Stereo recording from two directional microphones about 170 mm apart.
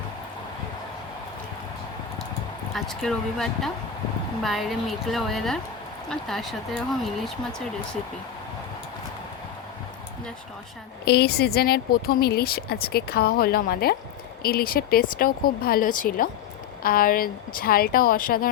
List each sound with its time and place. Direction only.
2.7 s a woman's voice: centre (ahead or behind)
11.0 s speech: 70° left (ahead or behind)